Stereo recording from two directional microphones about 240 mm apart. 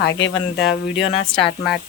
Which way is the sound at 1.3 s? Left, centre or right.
Left.